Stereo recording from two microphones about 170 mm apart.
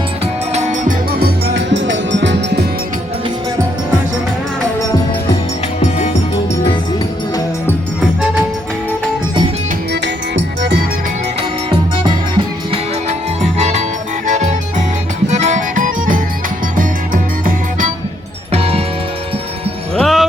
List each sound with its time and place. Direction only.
0.5 s music: 45° right (ahead or behind); by 2.6 s 85° right
9.9 s music: 85° right
13.6 s music: 40° right (ahead or behind)
18.5 s music: 35° right (ahead or behind)
20.0 s music: centre (ahead or behind)